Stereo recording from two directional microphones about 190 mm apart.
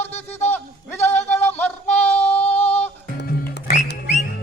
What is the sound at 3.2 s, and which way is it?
Music, 50° left (ahead or behind).